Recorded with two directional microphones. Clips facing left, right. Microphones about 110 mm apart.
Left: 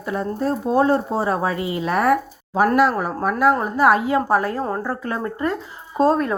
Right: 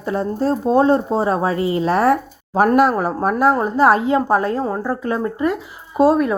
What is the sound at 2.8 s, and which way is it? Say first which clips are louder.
Speech: right 3 dB; 40° right (ahead or behind).